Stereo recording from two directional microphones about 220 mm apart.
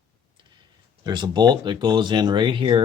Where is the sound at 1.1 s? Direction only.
20° right (ahead or behind).